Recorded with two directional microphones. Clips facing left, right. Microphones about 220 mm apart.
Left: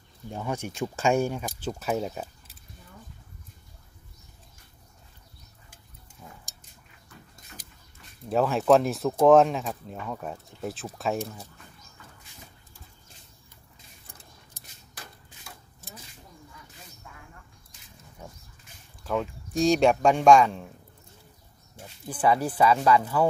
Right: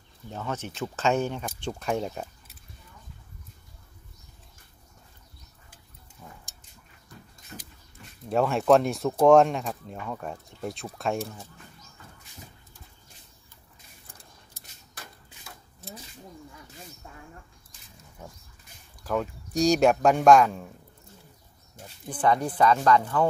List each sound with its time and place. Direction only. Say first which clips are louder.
0.3 s speech: left 2 dB; 15° left (ahead or behind)
6.2 s a sound: even; 5° left (ahead or behind)
8.3 s speech: even; centre (ahead or behind)
17.0 s a sound: right 3 dB; 35° right (ahead or behind)
19.0 s speech: even; centre (ahead or behind)
22.1 s speech: even; 5° left (ahead or behind)